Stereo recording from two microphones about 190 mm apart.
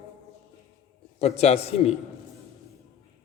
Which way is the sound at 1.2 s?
35° left (ahead or behind).